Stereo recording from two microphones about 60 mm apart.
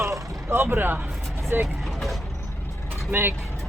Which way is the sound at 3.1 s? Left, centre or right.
Right.